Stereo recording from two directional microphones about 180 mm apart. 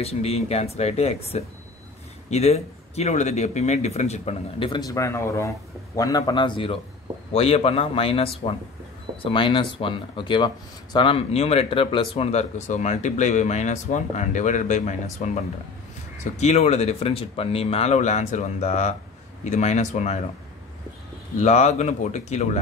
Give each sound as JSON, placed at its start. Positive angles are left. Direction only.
{"t": 0.0, "sound": "speech", "side_deg": 35}
{"t": 21.4, "sound": "speech", "side_deg": 40}